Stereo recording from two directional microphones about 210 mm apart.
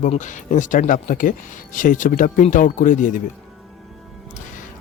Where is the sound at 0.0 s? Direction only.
35° left (ahead or behind).